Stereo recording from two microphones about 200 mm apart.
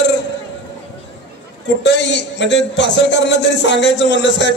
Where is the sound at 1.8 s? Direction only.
60° left (ahead or behind).